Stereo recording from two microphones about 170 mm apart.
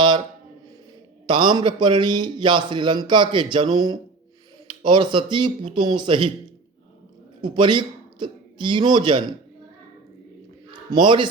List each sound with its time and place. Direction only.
1.3 s a man's voice: 30° right (ahead or behind)
7.4 s a man's voice: 30° right (ahead or behind)
10.9 s a man's voice: 30° right (ahead or behind)